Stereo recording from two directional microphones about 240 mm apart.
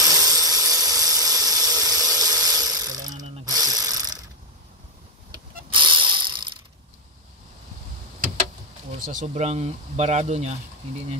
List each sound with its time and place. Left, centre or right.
0.0 s a sound: centre
3.4 s ratchet: centre
5.3 s ratchet: centre
9.0 s speech: right